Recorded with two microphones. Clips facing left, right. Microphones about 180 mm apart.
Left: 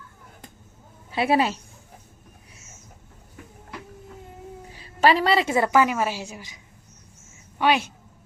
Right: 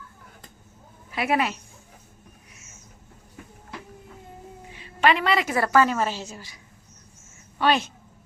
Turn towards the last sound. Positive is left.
turn(degrees=10)  # may be behind; listen again after turning